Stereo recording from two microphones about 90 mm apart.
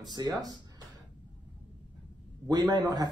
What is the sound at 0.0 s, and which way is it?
Speech, 50° right (ahead or behind).